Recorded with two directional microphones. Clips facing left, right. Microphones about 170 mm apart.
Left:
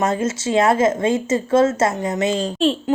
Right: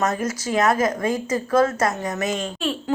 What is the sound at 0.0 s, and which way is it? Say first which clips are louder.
A woman's voice: left 3 dB; 25° left (ahead or behind).